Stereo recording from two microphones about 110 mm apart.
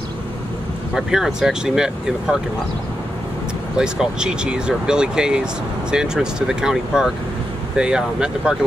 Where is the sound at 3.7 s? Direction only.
5° right (ahead or behind).